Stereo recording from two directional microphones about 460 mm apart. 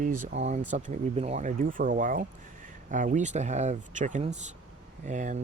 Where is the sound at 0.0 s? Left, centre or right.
Centre.